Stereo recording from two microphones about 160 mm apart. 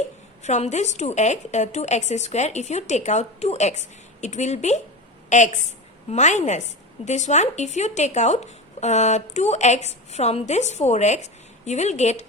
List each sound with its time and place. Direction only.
0.4 s a woman's voice: 45° left (ahead or behind)